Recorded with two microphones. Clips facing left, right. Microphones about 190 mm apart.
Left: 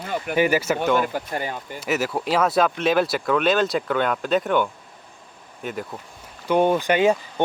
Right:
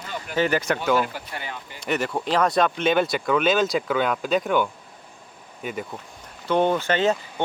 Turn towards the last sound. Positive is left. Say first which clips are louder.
# left 3 dB
turn(degrees=10)  # may be behind; listen again after turning